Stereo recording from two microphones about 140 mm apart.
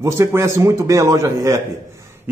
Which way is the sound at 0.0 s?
20° right (ahead or behind).